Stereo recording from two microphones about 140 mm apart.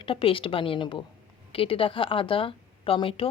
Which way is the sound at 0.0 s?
40° left (ahead or behind).